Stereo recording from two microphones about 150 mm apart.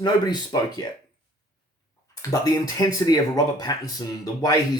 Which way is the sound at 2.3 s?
25° left (ahead or behind).